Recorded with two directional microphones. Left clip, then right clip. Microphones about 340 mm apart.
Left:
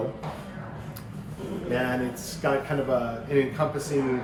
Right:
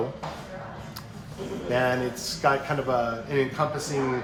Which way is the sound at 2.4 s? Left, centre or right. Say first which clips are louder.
Right 1 dB; centre.